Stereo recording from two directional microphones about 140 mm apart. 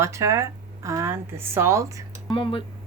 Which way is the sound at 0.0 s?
20° right (ahead or behind).